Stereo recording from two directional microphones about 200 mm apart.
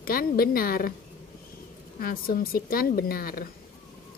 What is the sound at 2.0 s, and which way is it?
A woman's voice, 45° left (ahead or behind).